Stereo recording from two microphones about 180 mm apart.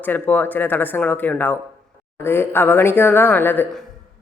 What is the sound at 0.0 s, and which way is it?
Speech, 10° left (ahead or behind).